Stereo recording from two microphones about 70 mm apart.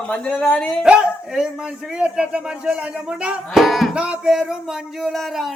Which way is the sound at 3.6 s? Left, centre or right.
Centre.